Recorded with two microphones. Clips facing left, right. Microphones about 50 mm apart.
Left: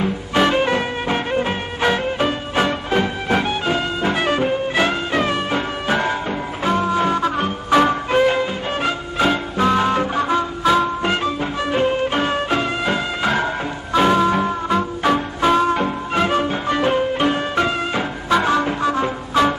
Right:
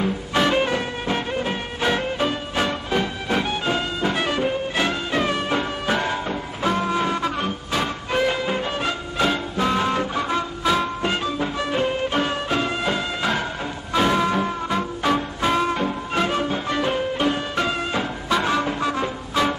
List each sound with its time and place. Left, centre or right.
0.0 s music: centre
7.7 s music: left
8.1 s music: centre